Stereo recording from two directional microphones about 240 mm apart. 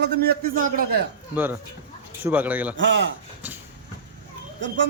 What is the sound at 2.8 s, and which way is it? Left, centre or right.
Speech, right.